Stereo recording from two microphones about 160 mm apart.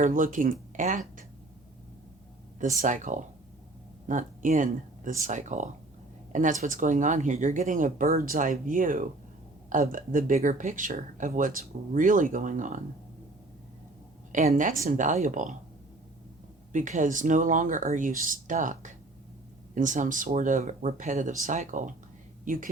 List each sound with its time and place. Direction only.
0.0 s speech: 55° right (ahead or behind)
2.6 s speech: 55° right (ahead or behind)
14.3 s speech: 55° right (ahead or behind)
16.7 s speech: 50° right (ahead or behind)